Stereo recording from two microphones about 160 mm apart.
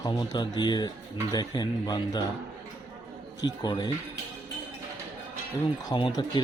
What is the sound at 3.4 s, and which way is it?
Speech, 25° left (ahead or behind).